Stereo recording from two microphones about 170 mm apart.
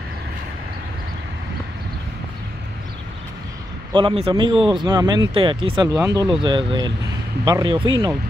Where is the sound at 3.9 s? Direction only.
30° right (ahead or behind).